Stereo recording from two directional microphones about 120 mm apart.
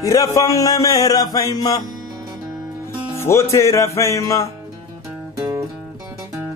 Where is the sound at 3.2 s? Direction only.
25° left (ahead or behind).